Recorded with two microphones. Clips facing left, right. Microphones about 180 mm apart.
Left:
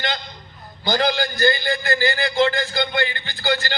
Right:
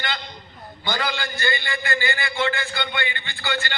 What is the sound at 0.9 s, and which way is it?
A man's voice, 40° left (ahead or behind).